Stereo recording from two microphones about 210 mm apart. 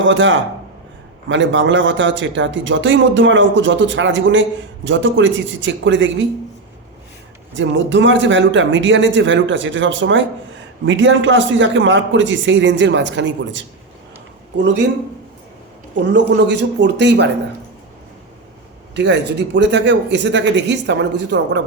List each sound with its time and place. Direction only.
0.0 s speech: 60° right (ahead or behind)
7.5 s speech: 60° right (ahead or behind)
16.1 s speech: 55° right (ahead or behind)
18.9 s speech: 55° right (ahead or behind)